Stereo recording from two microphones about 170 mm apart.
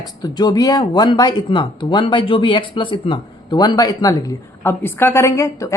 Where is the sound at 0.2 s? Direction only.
25° left (ahead or behind).